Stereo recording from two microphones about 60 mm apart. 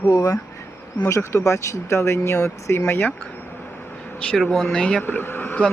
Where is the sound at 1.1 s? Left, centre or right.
Left.